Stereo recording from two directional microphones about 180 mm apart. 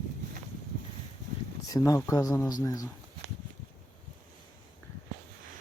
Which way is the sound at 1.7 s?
20° left (ahead or behind).